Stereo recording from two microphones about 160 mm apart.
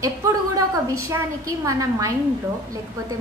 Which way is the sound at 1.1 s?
20° right (ahead or behind).